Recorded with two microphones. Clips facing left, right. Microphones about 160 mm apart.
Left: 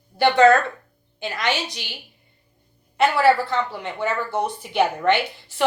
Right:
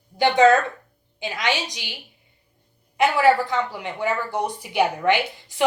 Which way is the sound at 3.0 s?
15° right (ahead or behind).